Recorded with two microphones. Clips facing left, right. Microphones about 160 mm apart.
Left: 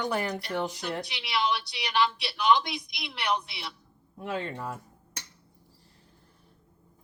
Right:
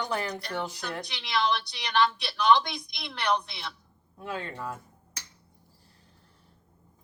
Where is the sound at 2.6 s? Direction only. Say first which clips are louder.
Left 1 dB; 35° right (ahead or behind).